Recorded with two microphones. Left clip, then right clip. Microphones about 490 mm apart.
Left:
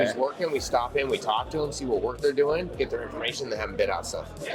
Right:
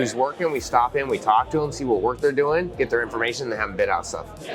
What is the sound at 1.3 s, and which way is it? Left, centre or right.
Speech, right.